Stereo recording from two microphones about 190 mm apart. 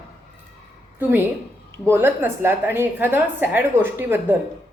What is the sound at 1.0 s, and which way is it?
A woman's voice, 10° right (ahead or behind).